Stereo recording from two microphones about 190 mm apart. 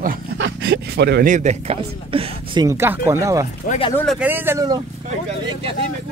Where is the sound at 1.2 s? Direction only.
40° right (ahead or behind); by 3.4 s 15° right (ahead or behind).